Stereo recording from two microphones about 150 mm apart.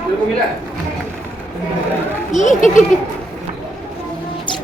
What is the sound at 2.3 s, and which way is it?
Speech, 55° left (ahead or behind).